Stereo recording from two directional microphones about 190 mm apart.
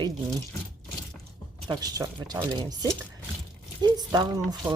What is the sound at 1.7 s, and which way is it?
Speech, 20° right (ahead or behind).